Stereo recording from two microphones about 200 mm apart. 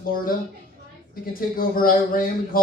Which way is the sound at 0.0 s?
45° left (ahead or behind).